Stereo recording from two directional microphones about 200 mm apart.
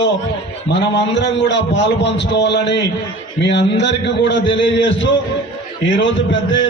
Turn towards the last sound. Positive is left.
turn(degrees=65)  # may be behind; listen again after turning